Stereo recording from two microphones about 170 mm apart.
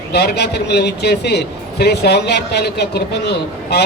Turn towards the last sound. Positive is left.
turn(degrees=75)  # may be behind; listen again after turning